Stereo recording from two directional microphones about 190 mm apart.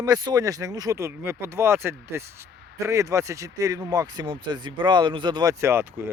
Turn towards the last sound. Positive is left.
turn(degrees=-15)  # may be behind; listen again after turning